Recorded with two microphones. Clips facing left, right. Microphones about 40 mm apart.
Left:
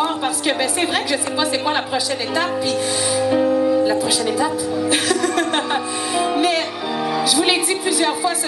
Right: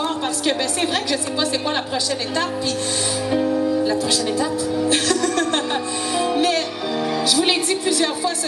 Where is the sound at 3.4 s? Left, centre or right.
Left.